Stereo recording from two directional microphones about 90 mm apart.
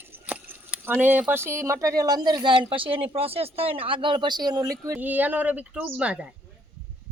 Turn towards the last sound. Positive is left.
turn(degrees=-10)  # may be behind; listen again after turning